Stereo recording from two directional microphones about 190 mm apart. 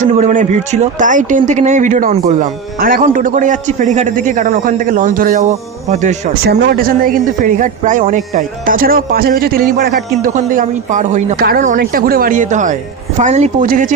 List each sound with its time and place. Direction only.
0.0 s a man's voice: 40° right (ahead or behind)
6.5 s a man's voice: 55° right (ahead or behind)